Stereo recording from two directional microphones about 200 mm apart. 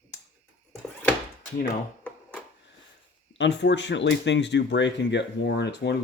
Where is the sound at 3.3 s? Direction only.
65° left (ahead or behind).